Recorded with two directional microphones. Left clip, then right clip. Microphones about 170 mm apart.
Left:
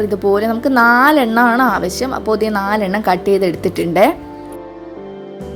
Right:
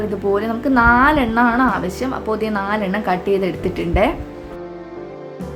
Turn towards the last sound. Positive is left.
turn(degrees=50)  # may be behind; listen again after turning